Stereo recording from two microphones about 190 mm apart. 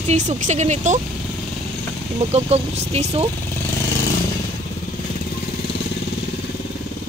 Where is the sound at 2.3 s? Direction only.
35° right (ahead or behind).